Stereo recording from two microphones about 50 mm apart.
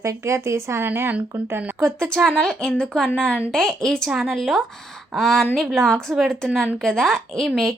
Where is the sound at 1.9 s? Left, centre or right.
Centre.